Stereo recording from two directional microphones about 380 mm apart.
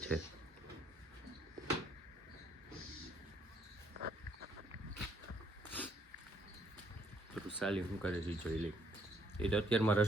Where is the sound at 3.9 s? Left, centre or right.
Right.